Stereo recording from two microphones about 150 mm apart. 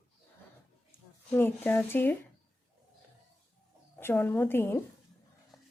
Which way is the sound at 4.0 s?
15° left (ahead or behind).